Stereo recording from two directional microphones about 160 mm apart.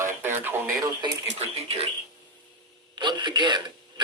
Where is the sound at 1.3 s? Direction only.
40° right (ahead or behind).